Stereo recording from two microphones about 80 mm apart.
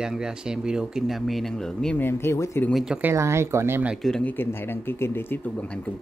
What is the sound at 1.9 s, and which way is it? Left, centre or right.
Speech, left.